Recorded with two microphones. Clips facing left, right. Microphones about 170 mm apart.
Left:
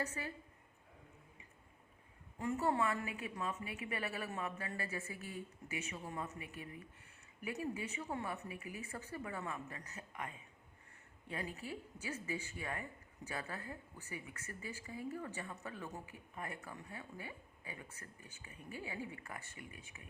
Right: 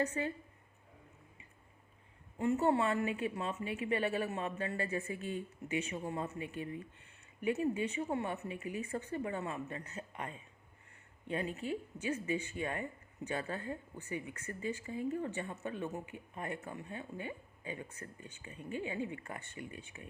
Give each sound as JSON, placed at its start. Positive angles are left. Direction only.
{"t": 0.0, "sound": "a woman's voice", "side_deg": -30}
{"t": 2.4, "sound": "a woman's voice", "side_deg": -25}